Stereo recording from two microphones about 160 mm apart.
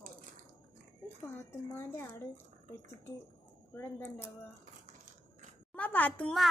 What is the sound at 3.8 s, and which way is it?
Speech, 15° left (ahead or behind).